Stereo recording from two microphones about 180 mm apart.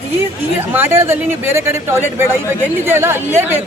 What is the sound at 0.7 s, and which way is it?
Speech, 15° right (ahead or behind).